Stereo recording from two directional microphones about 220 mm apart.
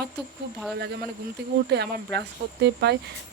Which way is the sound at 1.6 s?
50° right (ahead or behind).